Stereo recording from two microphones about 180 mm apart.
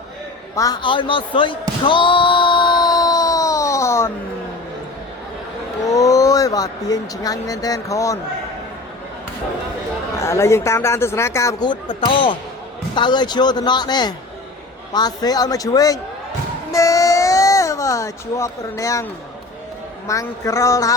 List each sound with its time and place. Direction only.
0.5 s basketball bounce: 20° left (ahead or behind)
5.9 s speech: 20° left (ahead or behind)
10.2 s speech: 15° left (ahead or behind)
16.7 s a sound: 20° left (ahead or behind)
20.1 s speech: 15° left (ahead or behind)